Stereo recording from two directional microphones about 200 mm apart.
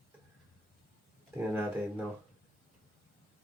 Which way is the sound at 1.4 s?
10° right (ahead or behind).